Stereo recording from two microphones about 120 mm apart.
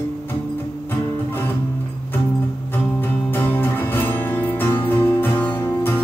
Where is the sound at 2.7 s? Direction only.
15° left (ahead or behind).